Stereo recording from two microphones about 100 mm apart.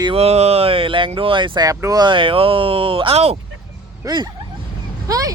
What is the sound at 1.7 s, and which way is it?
Speech, 35° right (ahead or behind).